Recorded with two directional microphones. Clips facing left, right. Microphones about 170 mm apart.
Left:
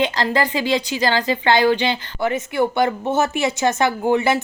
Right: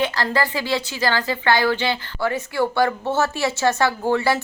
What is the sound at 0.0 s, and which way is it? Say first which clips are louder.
A woman's voice: left 2 dB; 20° left (ahead or behind).